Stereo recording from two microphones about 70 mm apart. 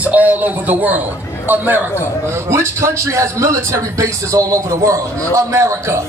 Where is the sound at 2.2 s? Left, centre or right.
Right.